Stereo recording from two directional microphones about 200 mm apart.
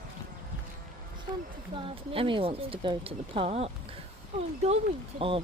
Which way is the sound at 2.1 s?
25° right (ahead or behind).